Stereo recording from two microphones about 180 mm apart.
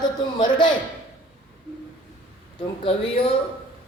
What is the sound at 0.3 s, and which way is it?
Speech, 25° left (ahead or behind).